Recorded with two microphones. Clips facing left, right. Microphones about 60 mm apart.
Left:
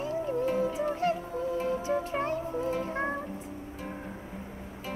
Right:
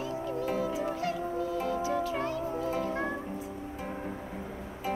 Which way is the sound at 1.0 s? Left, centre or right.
Left.